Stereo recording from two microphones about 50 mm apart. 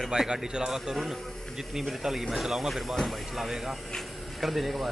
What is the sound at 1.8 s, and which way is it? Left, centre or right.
Speech, centre.